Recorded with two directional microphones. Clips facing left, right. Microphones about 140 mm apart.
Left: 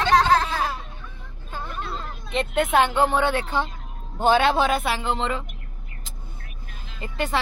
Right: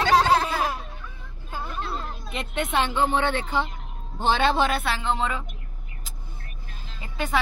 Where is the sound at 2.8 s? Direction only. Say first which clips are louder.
Left 3 dB; 70° left (ahead or behind).